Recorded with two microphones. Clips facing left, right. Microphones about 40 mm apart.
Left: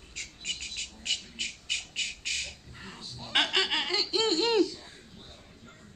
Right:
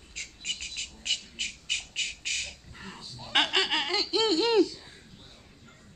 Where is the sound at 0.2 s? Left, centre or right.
Right.